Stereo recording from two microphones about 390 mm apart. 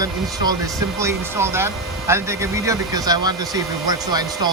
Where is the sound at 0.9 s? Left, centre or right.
Centre.